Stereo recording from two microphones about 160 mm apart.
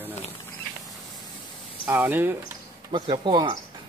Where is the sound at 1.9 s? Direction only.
10° right (ahead or behind).